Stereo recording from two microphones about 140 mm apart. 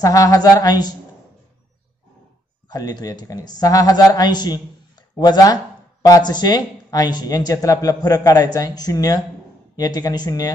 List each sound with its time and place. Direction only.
0.0 s a man's voice: 25° left (ahead or behind)
2.7 s a man's voice: 25° left (ahead or behind)